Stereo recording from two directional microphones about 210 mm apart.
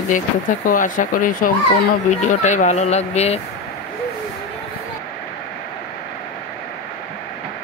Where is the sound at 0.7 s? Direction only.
40° left (ahead or behind).